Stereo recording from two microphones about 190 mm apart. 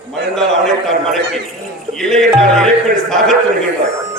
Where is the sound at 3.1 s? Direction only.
Centre (ahead or behind).